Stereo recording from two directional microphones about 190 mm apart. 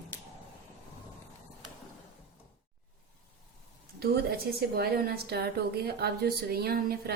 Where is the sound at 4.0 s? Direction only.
55° right (ahead or behind).